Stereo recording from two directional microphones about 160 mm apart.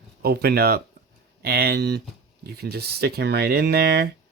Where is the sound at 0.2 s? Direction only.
75° right (ahead or behind).